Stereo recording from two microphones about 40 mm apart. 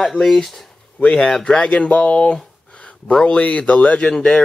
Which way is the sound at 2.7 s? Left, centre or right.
Left.